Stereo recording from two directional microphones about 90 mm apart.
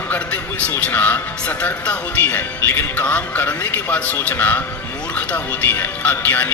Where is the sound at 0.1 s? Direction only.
15° left (ahead or behind).